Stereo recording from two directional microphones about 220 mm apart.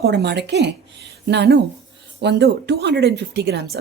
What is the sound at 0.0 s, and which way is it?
Speech, 50° right (ahead or behind).